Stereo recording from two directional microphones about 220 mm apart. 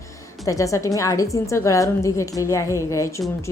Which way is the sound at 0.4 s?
15° left (ahead or behind).